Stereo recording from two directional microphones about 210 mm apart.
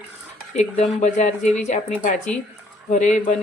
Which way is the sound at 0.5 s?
35° left (ahead or behind).